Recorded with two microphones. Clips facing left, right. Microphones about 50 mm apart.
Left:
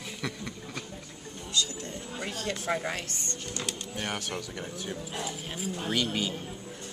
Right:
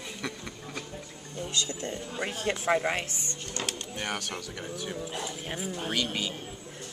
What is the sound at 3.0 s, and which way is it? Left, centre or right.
Speech, centre.